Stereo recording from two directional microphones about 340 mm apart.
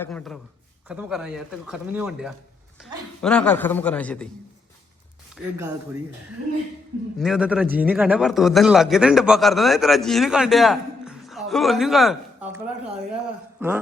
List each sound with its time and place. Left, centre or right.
0.0 s a man's voice: centre
5.5 s speech: centre
7.2 s a man's voice: centre